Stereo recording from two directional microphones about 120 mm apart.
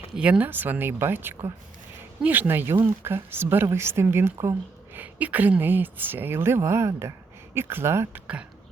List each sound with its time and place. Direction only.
0.2 s speech: 10° right (ahead or behind)